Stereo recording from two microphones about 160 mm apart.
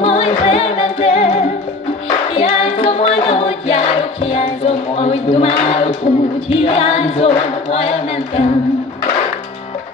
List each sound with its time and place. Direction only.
0.0 s music: 35° left (ahead or behind)
6.5 s a capella: 35° left (ahead or behind)